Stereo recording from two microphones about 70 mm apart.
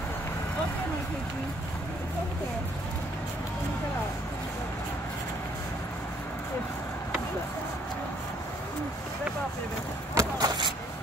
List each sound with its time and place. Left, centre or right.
10.1 s vehicle: right